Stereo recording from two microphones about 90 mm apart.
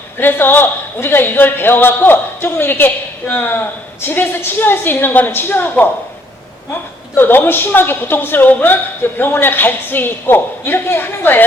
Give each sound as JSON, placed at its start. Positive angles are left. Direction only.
{"t": 0.2, "sound": "a woman's voice", "side_deg": 25}
{"t": 7.2, "sound": "a woman's voice", "side_deg": 25}